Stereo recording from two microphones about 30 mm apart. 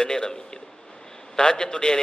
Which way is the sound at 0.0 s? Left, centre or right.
Left.